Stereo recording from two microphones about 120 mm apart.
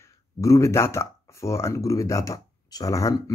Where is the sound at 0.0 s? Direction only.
25° left (ahead or behind).